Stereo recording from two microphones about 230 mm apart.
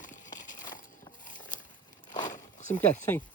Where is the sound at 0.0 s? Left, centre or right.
Left.